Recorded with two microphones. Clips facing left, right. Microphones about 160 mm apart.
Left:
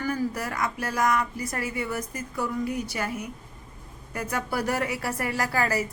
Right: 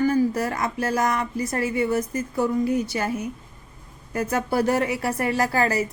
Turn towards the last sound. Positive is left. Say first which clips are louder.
# right 4 dB
turn(degrees=-25)  # may be behind; listen again after turning